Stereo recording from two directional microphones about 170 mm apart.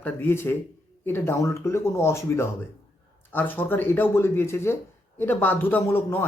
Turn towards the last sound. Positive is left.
turn(degrees=15)  # may be behind; listen again after turning